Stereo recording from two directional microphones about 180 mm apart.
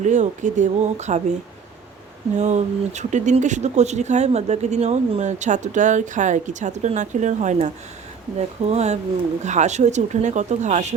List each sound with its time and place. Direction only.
0.0 s speech: 40° right (ahead or behind)
2.3 s speech: 40° right (ahead or behind)